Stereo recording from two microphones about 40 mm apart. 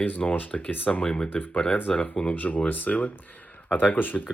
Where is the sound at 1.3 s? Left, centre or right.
Left.